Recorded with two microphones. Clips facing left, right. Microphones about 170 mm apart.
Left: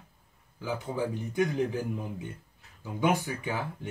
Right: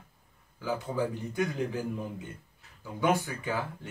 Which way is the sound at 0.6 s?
20° left (ahead or behind).